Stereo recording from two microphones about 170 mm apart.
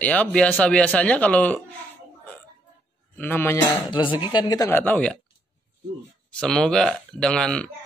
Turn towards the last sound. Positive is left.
turn(degrees=5)  # may be behind; listen again after turning